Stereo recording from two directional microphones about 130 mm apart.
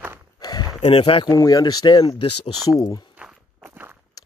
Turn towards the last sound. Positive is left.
turn(degrees=-15)  # may be behind; listen again after turning